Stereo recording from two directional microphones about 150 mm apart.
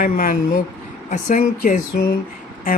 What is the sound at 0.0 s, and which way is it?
Speech, 65° left (ahead or behind).